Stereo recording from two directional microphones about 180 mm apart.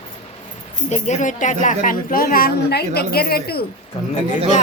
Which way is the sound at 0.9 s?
40° left (ahead or behind).